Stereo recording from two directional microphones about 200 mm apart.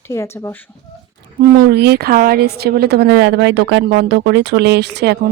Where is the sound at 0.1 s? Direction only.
15° left (ahead or behind).